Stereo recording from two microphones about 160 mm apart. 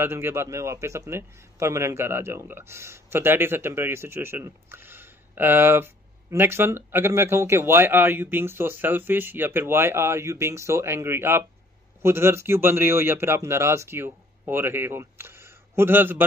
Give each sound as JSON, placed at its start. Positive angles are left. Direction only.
{"t": 0.0, "sound": "a man's voice", "side_deg": -15}